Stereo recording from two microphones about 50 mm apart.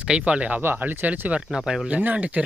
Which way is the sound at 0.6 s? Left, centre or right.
Right.